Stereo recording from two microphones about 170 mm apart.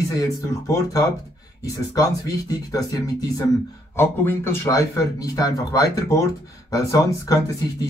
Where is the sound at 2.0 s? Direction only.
20° left (ahead or behind).